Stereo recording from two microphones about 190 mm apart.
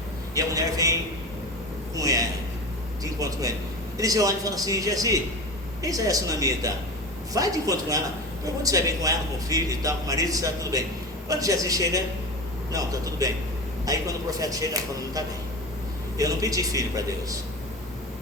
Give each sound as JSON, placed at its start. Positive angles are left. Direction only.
{"t": 0.3, "sound": "a man's voice", "side_deg": -20}
{"t": 2.0, "sound": "a man's voice", "side_deg": -20}